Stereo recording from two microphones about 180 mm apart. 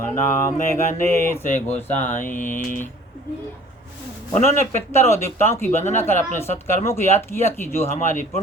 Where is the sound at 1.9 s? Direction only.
45° left (ahead or behind).